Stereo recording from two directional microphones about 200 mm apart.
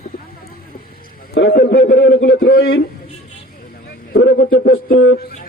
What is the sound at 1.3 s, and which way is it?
A man's voice, 55° left (ahead or behind).